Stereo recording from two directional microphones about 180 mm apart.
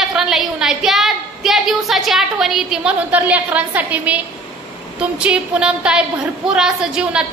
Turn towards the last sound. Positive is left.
turn(degrees=-5)  # may be behind; listen again after turning